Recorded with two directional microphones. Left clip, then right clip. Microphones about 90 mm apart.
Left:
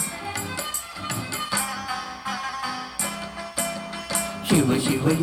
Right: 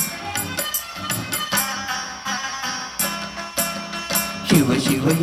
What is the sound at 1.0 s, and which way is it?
Music, 25° right (ahead or behind).